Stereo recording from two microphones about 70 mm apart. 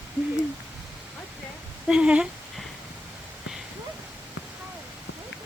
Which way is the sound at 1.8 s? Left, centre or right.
Centre.